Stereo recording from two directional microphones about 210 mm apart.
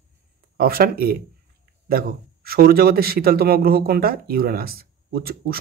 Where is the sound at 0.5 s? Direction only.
45° right (ahead or behind).